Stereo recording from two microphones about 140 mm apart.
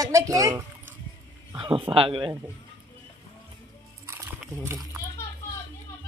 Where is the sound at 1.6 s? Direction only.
40° right (ahead or behind).